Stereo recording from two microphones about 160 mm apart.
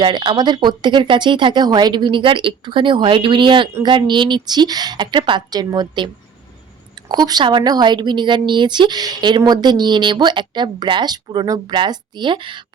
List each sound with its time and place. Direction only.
0.0 s a woman's voice: 30° right (ahead or behind)